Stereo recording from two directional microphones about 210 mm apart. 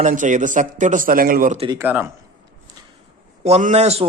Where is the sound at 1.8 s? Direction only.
10° right (ahead or behind).